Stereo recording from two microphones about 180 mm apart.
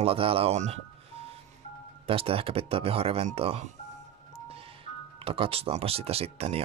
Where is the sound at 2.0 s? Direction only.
30° right (ahead or behind).